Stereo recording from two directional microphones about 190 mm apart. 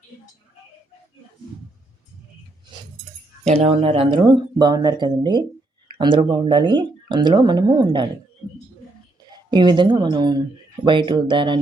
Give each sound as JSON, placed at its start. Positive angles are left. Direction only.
{"t": 3.4, "sound": "speech", "side_deg": -35}
{"t": 9.5, "sound": "speech", "side_deg": -25}